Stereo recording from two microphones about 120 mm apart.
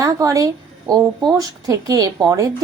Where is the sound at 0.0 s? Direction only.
25° right (ahead or behind).